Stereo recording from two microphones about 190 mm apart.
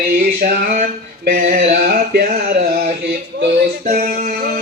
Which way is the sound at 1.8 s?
55° right (ahead or behind).